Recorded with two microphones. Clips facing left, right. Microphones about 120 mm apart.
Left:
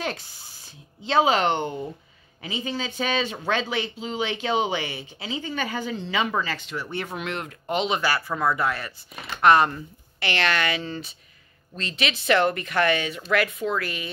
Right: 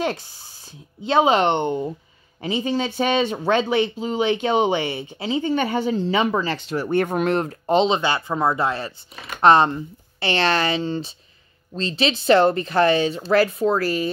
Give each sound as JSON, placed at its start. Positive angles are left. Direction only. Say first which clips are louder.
{"t": 0.0, "sound": "speech", "louder": "right 6 dB", "side_deg": -25}